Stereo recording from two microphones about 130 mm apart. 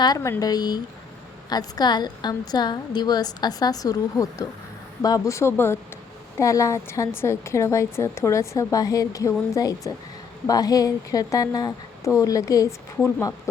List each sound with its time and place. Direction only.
0.2 s a woman's voice: 25° left (ahead or behind)